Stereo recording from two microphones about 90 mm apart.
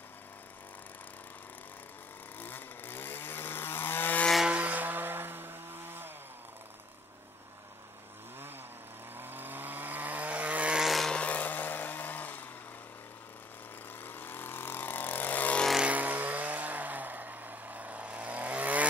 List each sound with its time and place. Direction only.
2.3 s chainsaw: 20° left (ahead or behind)
4.5 s a sound: 15° right (ahead or behind)
9.1 s vehicle: 20° right (ahead or behind)
10.9 s vehicle: centre (ahead or behind)
11.1 s chainsaw: 15° left (ahead or behind)
14.0 s vehicle: 20° left (ahead or behind)
15.8 s vehicle: 20° right (ahead or behind)